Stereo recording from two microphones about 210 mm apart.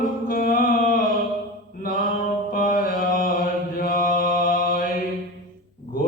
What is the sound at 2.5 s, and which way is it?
Mantra, 40° left (ahead or behind).